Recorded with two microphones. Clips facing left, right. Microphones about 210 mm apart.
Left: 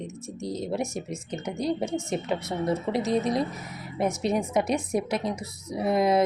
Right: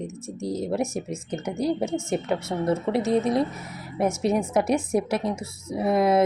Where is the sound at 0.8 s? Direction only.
30° right (ahead or behind).